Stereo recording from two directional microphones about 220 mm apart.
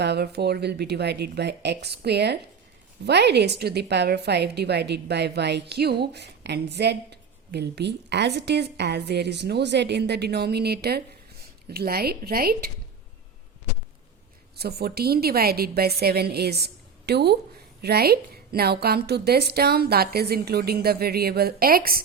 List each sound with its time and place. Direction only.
0.0 s a woman's voice: 50° right (ahead or behind)
14.5 s a woman's voice: 45° right (ahead or behind)